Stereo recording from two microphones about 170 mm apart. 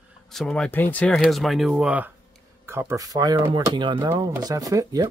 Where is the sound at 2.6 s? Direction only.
15° right (ahead or behind).